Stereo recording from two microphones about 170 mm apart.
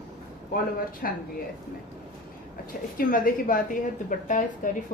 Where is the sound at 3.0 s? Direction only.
55° left (ahead or behind).